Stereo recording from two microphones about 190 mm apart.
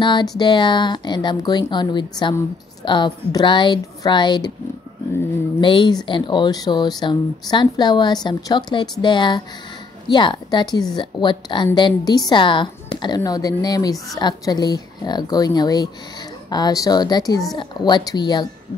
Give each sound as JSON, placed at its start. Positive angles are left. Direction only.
{"t": 0.0, "sound": "a woman's voice", "side_deg": 25}
{"t": 5.6, "sound": "a woman's voice", "side_deg": 25}